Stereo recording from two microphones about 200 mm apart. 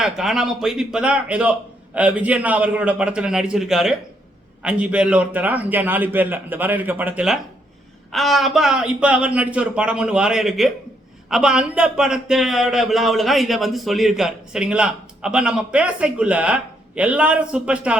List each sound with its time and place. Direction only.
0.0 s a man's voice: centre (ahead or behind)